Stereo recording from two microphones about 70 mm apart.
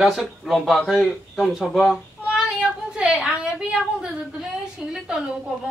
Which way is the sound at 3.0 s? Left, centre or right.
Centre.